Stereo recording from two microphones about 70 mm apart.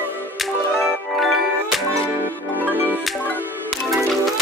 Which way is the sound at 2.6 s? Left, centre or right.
Right.